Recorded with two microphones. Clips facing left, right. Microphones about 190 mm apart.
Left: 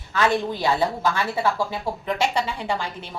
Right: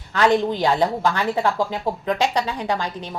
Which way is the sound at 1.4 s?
15° right (ahead or behind).